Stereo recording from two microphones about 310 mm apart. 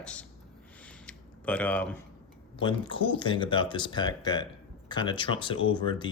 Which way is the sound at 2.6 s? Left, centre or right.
Centre.